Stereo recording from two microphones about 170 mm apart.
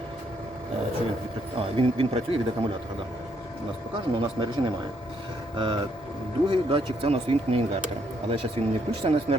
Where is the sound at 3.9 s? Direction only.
30° right (ahead or behind).